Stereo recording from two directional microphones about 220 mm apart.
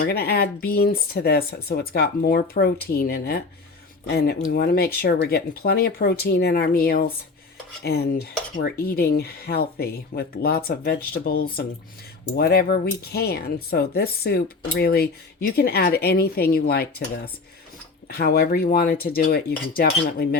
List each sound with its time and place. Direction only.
0.0 s speech: 45° left (ahead or behind)
18.1 s speech: 45° left (ahead or behind)